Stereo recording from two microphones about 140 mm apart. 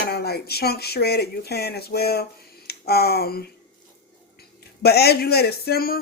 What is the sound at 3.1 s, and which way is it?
Speech, 90° left.